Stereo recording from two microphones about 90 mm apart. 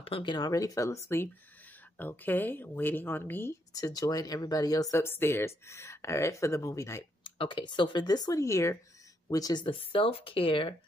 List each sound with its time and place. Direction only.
0.0 s speech: 75° left (ahead or behind)
0.4 s speech: 40° left (ahead or behind); by 3.5 s 25° left (ahead or behind)
3.7 s speech: 45° left (ahead or behind)
4.9 s speech: 25° left (ahead or behind)
7.2 s speech: 65° left (ahead or behind); by 8.7 s 35° left (ahead or behind)
9.3 s speech: 45° left (ahead or behind)
9.7 s speech: 90° left